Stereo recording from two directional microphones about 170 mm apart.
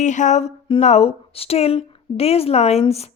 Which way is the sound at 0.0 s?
45° left (ahead or behind).